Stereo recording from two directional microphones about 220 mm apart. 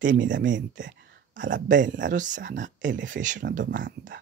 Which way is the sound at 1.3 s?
35° right (ahead or behind).